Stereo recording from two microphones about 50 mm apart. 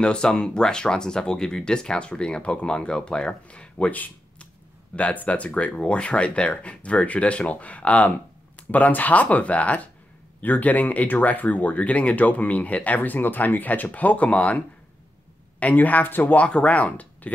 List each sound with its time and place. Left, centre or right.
0.0 s speech: centre
3.7 s a sound: left
4.9 s speech: left
15.6 s speech: left
16.3 s speech: left